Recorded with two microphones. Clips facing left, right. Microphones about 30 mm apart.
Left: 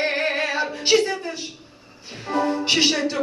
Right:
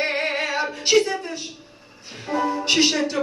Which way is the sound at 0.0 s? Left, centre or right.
Centre.